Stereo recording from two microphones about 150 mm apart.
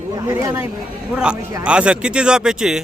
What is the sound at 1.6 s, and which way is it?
Speech, 5° right (ahead or behind).